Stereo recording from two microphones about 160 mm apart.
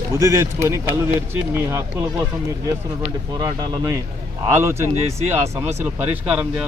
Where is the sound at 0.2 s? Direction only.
20° right (ahead or behind).